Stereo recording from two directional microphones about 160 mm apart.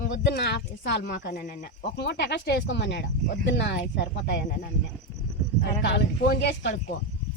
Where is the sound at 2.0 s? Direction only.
90° left.